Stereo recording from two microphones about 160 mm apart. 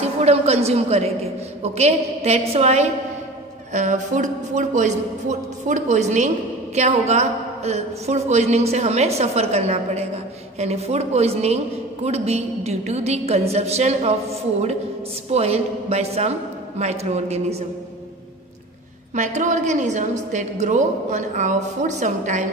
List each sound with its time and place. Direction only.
0.0 s a woman's voice: 40° right (ahead or behind)
19.1 s a man's voice: 50° right (ahead or behind)